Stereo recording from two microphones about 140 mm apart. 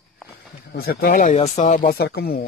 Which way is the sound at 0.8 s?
90° left.